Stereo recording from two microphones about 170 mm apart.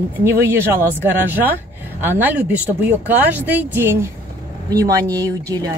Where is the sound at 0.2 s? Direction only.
15° right (ahead or behind).